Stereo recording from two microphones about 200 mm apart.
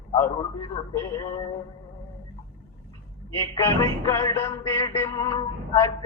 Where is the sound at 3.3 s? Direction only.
15° left (ahead or behind).